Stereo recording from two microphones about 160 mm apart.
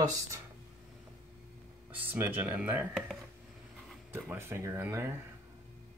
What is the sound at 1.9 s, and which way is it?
Speech, 10° right (ahead or behind).